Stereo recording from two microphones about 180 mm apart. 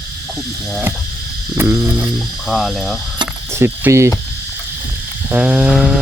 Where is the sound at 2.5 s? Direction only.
Centre (ahead or behind).